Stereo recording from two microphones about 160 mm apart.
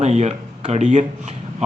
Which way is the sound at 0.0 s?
45° right (ahead or behind).